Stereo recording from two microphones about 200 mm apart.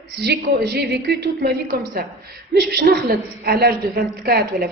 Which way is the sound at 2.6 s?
55° right (ahead or behind).